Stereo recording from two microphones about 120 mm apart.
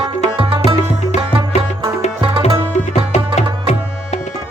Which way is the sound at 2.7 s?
70° left (ahead or behind).